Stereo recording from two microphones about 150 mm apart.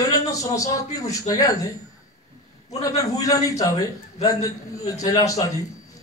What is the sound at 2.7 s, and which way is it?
A man's voice, 25° left (ahead or behind).